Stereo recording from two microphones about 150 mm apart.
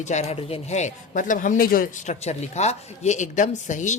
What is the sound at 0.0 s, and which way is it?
Speech, 50° left (ahead or behind).